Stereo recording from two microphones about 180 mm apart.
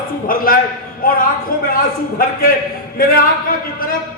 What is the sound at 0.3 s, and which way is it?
A man's voice, 50° left (ahead or behind).